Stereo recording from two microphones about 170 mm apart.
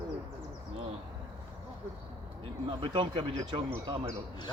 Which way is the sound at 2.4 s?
30° right (ahead or behind).